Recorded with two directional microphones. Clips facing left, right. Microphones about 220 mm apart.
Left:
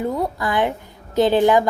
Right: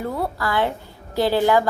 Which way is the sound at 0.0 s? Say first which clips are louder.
Left 3 dB; 20° left (ahead or behind).